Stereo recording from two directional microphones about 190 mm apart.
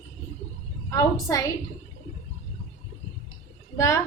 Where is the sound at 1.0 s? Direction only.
20° left (ahead or behind).